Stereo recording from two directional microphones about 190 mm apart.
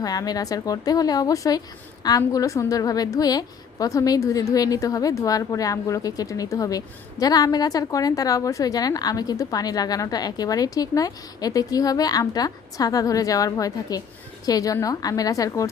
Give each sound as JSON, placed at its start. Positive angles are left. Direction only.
{"t": 0.0, "sound": "a woman's voice", "side_deg": 20}